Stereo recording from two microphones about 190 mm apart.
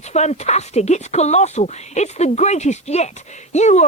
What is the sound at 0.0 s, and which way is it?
Speech, 35° left (ahead or behind).